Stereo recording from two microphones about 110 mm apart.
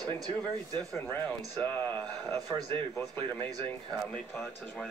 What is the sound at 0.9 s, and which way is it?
Speech, 20° left (ahead or behind).